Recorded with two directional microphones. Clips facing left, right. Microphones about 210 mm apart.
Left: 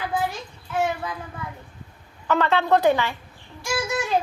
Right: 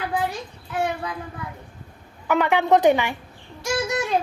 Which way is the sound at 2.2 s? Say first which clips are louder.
Right 1 dB; 15° right (ahead or behind).